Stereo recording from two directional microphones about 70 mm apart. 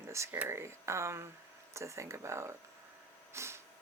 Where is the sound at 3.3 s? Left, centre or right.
Right.